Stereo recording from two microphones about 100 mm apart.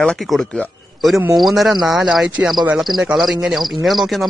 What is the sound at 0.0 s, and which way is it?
Speech, 5° left (ahead or behind).